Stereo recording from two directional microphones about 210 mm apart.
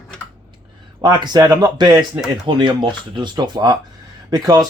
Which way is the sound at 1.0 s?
20° right (ahead or behind).